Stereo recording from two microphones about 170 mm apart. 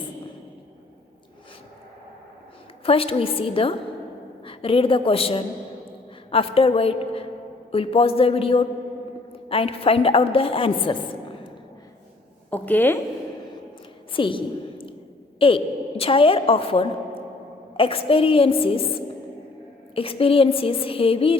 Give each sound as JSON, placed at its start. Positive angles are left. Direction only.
{"t": 2.8, "sound": "a woman's voice", "side_deg": 35}
{"t": 12.5, "sound": "a woman's voice", "side_deg": 10}
{"t": 14.1, "sound": "a sound", "side_deg": 30}
{"t": 15.4, "sound": "a woman's voice", "side_deg": 30}
{"t": 20.0, "sound": "a woman's voice", "side_deg": 35}